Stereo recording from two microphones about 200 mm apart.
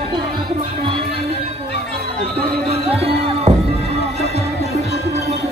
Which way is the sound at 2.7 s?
30° right (ahead or behind).